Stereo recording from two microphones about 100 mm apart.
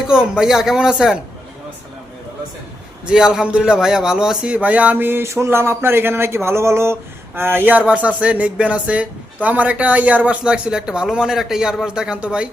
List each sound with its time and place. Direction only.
0.1 s speech: 5° right (ahead or behind)
3.1 s speech: 5° right (ahead or behind)